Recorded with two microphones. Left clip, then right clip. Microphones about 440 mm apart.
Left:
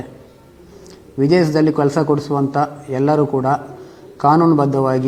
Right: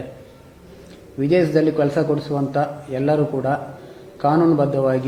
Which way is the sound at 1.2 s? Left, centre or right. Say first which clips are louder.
Left 3 dB; left.